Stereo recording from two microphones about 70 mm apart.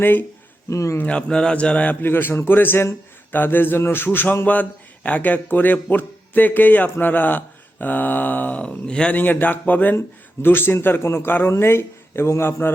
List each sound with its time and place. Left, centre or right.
0.0 s speech: left
0.7 s a man's voice: left
1.0 s speech: centre
9.1 s speech: left